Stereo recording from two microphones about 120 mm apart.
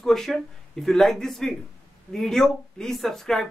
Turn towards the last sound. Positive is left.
turn(degrees=5)  # may be behind; listen again after turning